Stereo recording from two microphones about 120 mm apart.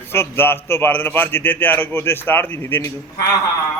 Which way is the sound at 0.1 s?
20° left (ahead or behind).